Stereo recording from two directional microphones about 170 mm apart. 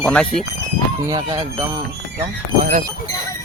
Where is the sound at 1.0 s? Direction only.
25° right (ahead or behind).